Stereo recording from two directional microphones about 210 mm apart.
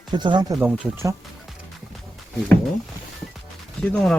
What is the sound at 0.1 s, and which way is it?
Speech, 20° right (ahead or behind).